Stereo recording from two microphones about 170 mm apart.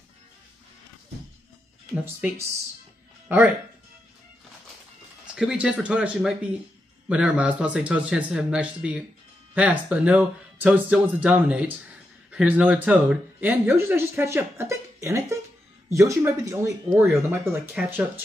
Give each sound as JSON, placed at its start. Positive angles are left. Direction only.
{"t": 5.2, "sound": "speech", "side_deg": -5}